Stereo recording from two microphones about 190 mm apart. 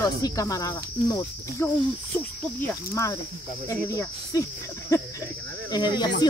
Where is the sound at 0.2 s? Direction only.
15° left (ahead or behind).